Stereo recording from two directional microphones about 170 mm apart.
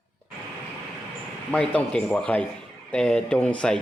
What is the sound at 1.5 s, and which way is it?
Speech, 10° left (ahead or behind).